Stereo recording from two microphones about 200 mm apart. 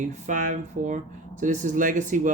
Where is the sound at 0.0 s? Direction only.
40° right (ahead or behind).